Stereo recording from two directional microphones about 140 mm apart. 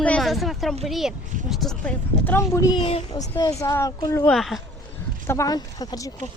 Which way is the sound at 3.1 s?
25° left (ahead or behind).